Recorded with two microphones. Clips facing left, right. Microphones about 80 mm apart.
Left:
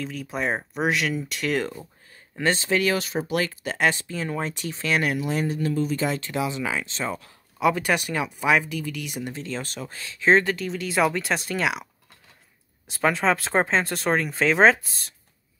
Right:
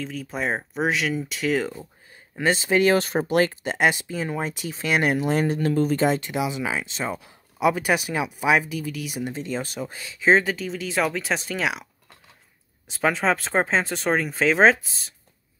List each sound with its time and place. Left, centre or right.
0.0 s speech: centre
2.9 s speech: right
3.6 s speech: centre
5.0 s speech: right
6.0 s speech: right
6.3 s speech: centre
9.2 s speech: centre